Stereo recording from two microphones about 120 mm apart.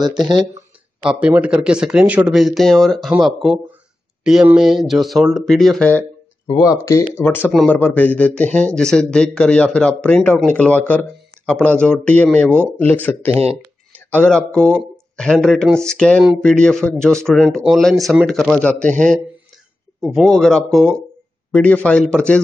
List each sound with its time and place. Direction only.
0.0 s speech: 35° right (ahead or behind)
1.2 s speech: 10° right (ahead or behind)
6.8 s speech: 25° left (ahead or behind)
7.2 s a man's voice: 15° left (ahead or behind)
20.0 s a man's voice: centre (ahead or behind)